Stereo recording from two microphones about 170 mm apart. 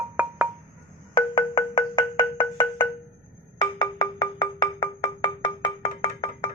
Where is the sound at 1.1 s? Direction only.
30° left (ahead or behind).